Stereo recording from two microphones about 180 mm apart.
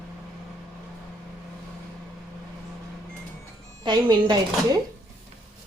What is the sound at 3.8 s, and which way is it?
Speech, 25° right (ahead or behind).